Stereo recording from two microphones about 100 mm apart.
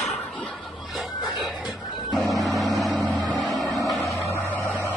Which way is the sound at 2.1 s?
Centre (ahead or behind).